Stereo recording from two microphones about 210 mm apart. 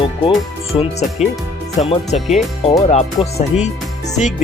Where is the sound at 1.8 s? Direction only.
30° left (ahead or behind).